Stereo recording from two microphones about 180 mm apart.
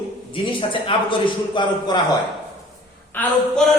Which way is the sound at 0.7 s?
30° left (ahead or behind).